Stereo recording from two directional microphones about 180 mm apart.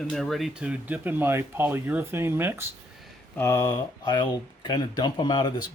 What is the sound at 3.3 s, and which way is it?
Speech, 15° left (ahead or behind).